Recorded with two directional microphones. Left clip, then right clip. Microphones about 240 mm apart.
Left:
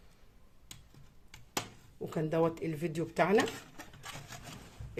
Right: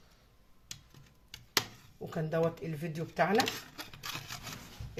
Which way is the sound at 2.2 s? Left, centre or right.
Centre.